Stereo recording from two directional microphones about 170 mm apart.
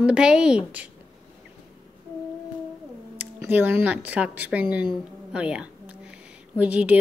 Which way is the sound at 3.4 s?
10° right (ahead or behind).